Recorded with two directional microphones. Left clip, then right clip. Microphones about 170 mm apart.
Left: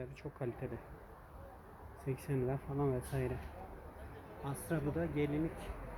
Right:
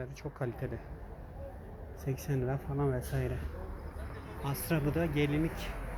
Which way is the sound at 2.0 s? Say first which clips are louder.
Right 2 dB; 25° left (ahead or behind).